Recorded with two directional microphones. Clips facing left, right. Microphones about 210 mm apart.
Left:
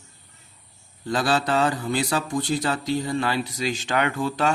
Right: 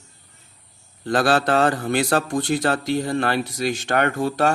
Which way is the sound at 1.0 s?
70° right (ahead or behind).